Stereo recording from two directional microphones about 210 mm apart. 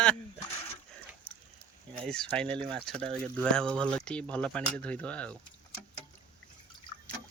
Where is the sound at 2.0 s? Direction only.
5° left (ahead or behind).